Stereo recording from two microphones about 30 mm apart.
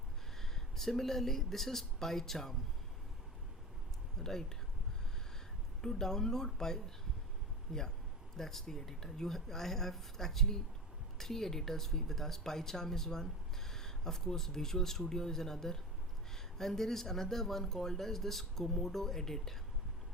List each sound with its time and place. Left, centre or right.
0.5 s speech: centre
4.2 s speech: centre
5.8 s speech: centre
8.4 s speech: centre